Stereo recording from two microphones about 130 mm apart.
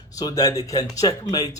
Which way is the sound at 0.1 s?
30° left (ahead or behind).